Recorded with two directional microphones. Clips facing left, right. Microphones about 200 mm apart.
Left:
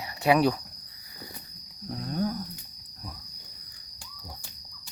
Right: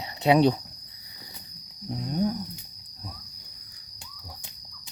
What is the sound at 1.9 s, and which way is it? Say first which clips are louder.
Cricket: right 3 dB; 15° right (ahead or behind).